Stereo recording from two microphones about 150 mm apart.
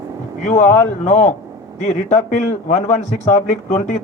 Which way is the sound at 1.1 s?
50° left (ahead or behind).